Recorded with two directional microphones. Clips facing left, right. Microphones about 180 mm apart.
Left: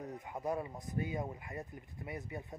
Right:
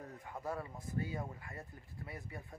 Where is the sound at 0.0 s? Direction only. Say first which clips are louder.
Left 4 dB; 20° left (ahead or behind).